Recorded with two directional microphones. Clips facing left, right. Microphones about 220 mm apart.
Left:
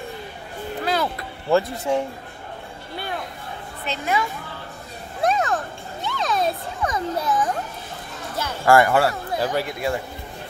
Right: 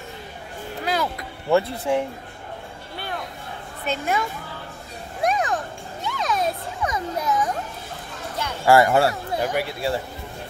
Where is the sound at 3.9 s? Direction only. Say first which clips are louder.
Even; 50° right (ahead or behind).